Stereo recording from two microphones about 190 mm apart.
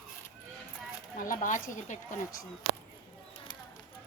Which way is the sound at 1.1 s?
45° left (ahead or behind).